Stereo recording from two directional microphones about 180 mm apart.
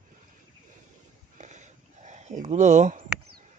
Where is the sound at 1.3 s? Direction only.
40° right (ahead or behind).